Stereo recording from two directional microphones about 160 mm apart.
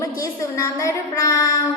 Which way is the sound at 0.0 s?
20° left (ahead or behind).